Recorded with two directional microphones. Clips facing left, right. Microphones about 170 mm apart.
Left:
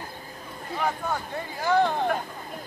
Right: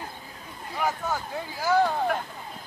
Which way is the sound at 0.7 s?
5° right (ahead or behind).